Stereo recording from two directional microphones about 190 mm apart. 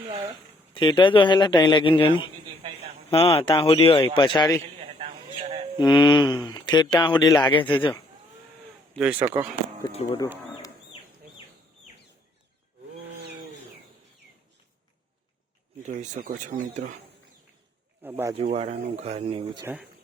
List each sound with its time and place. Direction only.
0.7 s speech: 25° left (ahead or behind)
4.6 s a sound: 30° right (ahead or behind)
5.7 s speech: 25° left (ahead or behind)
9.0 s speech: 10° right (ahead or behind)
9.2 s speech: 25° right (ahead or behind)
9.8 s speech: 25° left (ahead or behind)
15.9 s speech: 45° right (ahead or behind)
18.0 s speech: 10° right (ahead or behind)
18.3 s speech: 35° right (ahead or behind)
19.6 s speech: 5° right (ahead or behind)